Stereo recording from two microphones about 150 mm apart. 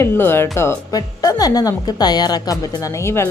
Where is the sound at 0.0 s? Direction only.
15° left (ahead or behind).